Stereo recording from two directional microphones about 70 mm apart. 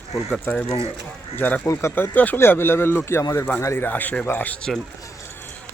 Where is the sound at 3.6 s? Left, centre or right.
Left.